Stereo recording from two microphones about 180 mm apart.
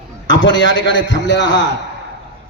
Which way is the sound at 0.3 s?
90° left.